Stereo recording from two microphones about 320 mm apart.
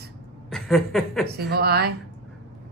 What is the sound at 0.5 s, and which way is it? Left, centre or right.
Chuckle, centre.